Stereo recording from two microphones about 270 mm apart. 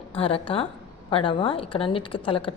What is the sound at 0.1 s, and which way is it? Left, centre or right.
A woman's voice, left.